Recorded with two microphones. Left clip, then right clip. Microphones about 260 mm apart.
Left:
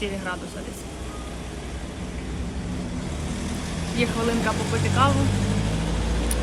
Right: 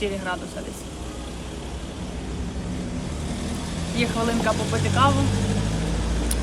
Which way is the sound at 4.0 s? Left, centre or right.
Centre.